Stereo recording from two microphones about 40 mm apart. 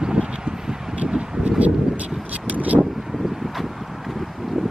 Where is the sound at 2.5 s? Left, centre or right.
Right.